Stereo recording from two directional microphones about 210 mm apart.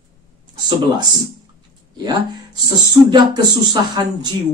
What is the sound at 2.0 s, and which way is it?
Speech, 20° right (ahead or behind).